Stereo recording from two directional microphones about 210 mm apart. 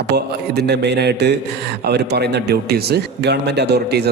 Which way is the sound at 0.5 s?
55° right (ahead or behind).